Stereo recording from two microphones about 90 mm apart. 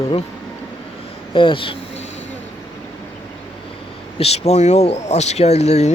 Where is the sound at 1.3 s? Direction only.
70° left (ahead or behind).